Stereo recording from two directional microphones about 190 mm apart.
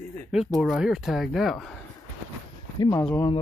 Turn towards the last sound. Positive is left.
turn(degrees=10)  # may be behind; listen again after turning